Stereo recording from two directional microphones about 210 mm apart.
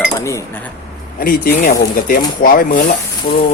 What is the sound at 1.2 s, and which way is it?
Speech, 45° left (ahead or behind).